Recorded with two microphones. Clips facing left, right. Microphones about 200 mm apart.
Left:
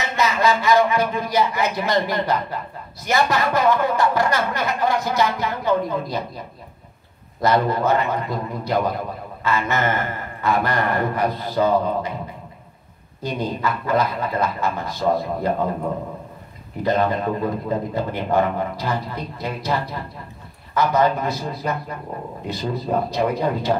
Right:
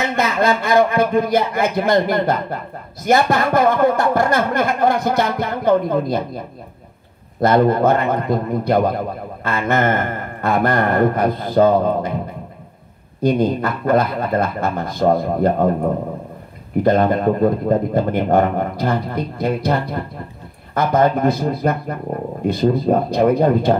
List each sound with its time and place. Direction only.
0.0 s a man's voice: 55° right (ahead or behind)
13.2 s a man's voice: 55° right (ahead or behind)